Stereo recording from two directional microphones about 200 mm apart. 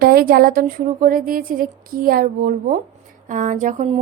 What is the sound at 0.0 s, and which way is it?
A woman's voice, 50° right (ahead or behind).